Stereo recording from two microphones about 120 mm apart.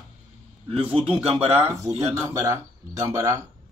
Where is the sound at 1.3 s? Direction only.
50° right (ahead or behind).